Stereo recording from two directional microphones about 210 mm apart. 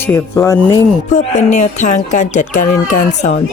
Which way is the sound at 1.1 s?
35° left (ahead or behind).